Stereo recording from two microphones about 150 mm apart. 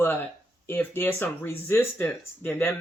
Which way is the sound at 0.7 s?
15° left (ahead or behind).